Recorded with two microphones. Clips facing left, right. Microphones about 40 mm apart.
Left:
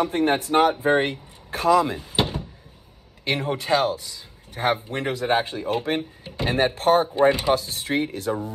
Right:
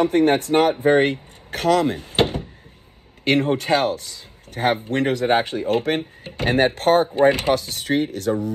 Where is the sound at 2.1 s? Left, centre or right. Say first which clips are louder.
Right 4 dB; right.